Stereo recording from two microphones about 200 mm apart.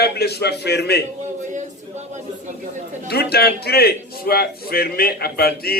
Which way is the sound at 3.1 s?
55° left (ahead or behind).